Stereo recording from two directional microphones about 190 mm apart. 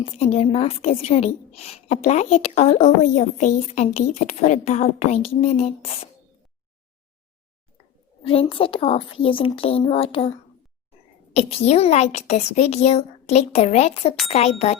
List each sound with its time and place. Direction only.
0.0 s a woman's voice: 30° left (ahead or behind)
8.2 s a woman's voice: 30° left (ahead or behind)
11.3 s a woman's voice: 35° left (ahead or behind)